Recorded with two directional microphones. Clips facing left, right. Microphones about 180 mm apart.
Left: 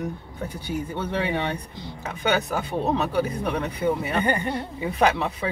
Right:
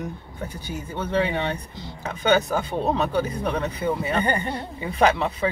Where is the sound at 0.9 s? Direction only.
15° left (ahead or behind).